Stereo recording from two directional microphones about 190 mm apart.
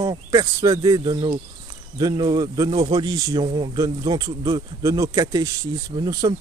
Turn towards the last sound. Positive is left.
turn(degrees=-20)  # may be behind; listen again after turning